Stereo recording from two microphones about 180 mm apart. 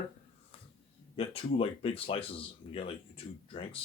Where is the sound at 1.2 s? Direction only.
30° left (ahead or behind).